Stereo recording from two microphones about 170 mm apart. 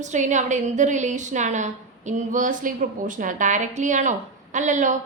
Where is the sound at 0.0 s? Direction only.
45° right (ahead or behind).